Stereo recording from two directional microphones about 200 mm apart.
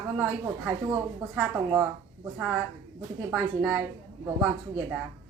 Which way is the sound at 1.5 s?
10° right (ahead or behind).